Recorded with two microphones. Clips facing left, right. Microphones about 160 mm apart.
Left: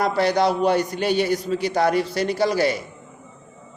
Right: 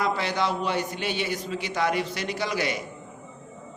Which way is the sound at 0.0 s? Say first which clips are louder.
Left 7 dB; 40° left (ahead or behind).